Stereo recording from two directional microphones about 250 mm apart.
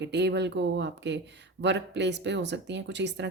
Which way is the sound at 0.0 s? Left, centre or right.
Right.